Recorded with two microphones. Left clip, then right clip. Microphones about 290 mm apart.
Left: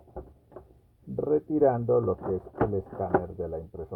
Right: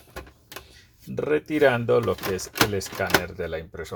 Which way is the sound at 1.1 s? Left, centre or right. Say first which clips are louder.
Right 2 dB; right.